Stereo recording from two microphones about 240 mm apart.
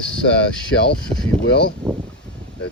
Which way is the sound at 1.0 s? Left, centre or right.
Centre.